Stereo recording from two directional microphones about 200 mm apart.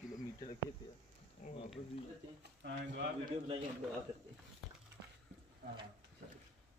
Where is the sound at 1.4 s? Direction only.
40° left (ahead or behind).